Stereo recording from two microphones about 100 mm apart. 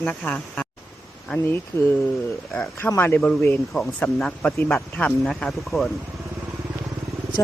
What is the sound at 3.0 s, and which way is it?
Speech, 20° left (ahead or behind).